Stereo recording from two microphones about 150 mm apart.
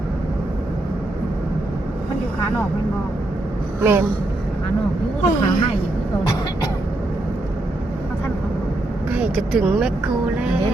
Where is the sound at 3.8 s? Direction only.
15° right (ahead or behind).